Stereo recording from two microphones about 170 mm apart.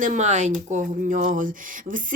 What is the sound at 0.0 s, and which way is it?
Speech, 45° right (ahead or behind).